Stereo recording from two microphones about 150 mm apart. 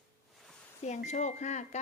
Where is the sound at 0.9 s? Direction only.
50° left (ahead or behind).